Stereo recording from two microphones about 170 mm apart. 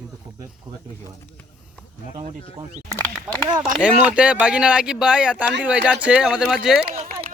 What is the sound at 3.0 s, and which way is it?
Speech, 10° left (ahead or behind).